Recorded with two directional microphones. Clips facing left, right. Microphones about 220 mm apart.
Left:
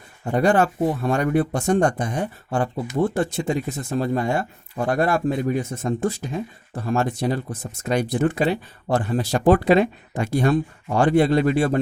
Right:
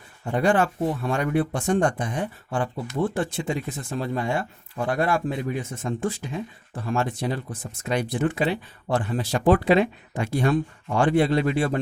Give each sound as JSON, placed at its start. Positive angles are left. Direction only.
{"t": 0.3, "sound": "speech", "side_deg": 40}